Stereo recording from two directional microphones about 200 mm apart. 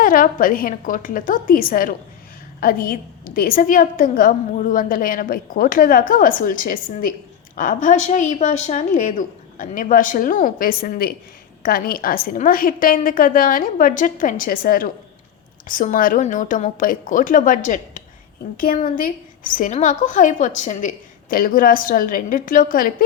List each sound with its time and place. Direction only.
0.0 s a woman's voice: 45° left (ahead or behind)